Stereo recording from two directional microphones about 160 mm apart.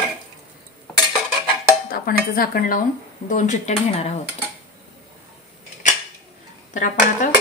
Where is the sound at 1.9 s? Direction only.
65° left (ahead or behind).